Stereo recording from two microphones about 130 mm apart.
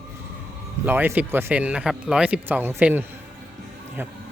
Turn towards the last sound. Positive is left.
turn(degrees=-15)  # may be behind; listen again after turning